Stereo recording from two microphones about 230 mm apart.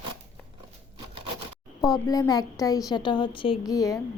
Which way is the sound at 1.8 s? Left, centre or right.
Centre.